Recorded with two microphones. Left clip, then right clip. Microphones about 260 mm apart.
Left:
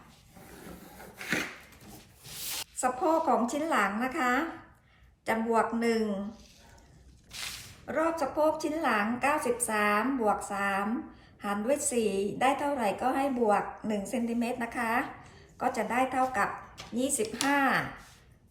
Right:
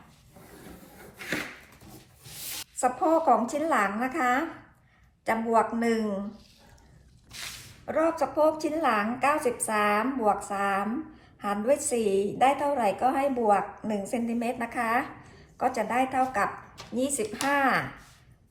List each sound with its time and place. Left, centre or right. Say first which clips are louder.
2.7 s a woman's voice: right 3 dB; centre
7.9 s a woman's voice: right 3 dB; right